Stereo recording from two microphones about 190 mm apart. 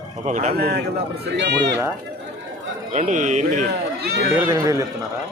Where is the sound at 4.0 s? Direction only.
55° right (ahead or behind).